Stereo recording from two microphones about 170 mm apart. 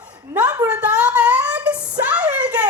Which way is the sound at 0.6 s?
10° right (ahead or behind).